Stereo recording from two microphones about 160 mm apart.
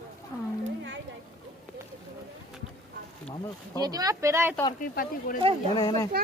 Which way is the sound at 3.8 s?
25° right (ahead or behind).